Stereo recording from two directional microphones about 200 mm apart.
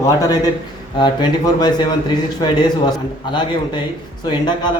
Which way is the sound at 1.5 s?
20° left (ahead or behind).